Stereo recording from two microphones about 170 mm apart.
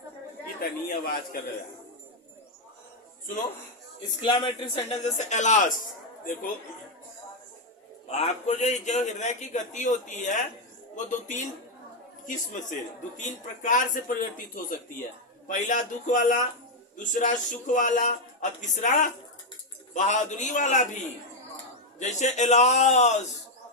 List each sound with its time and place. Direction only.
0.6 s a man's voice: 60° left (ahead or behind)
4.2 s a man's voice: 30° left (ahead or behind); by 5.7 s 45° left (ahead or behind)
8.1 s a man's voice: 40° left (ahead or behind)